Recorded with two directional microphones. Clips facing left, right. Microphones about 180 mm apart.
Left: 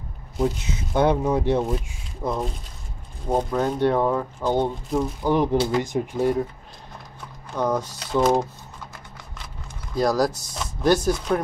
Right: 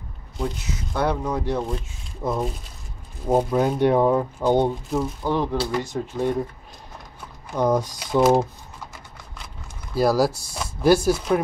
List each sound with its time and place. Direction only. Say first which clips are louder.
0.9 s speech: left 4 dB; 20° left (ahead or behind)
1.6 s speech: left 3 dB; 5° left (ahead or behind); by 4.7 s 15° right (ahead or behind)
4.8 s speech: left 1 dB; centre (ahead or behind)
5.2 s speech: left 3 dB; 15° left (ahead or behind)
6.1 s speech: left 1 dB; 5° left (ahead or behind)
7.5 s speech: right 3 dB; 10° right (ahead or behind)
9.9 s speech: right 2 dB; 5° right (ahead or behind)